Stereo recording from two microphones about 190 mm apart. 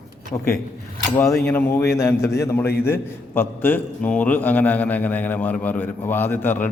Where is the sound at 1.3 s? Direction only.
10° left (ahead or behind).